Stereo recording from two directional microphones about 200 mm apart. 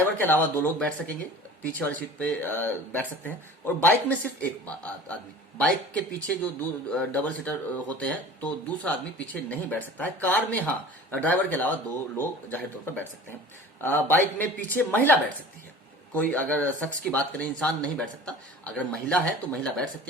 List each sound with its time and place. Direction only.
0.0 s speech: 10° left (ahead or behind)
16.1 s speech: 5° left (ahead or behind)